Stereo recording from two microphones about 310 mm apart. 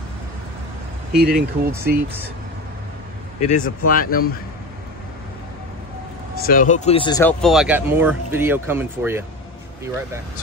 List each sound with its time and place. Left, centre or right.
1.3 s speech: centre
3.3 s speech: left
6.3 s speech: left; by 9.2 s centre